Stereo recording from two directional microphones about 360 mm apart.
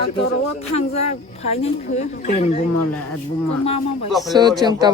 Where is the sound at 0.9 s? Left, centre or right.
Centre.